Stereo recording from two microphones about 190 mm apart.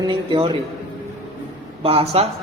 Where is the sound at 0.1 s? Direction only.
25° right (ahead or behind).